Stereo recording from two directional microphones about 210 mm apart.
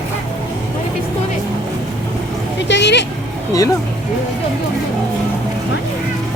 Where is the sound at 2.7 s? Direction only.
55° left (ahead or behind).